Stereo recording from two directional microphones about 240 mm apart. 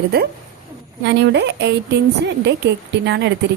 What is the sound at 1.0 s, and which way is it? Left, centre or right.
Speech, right.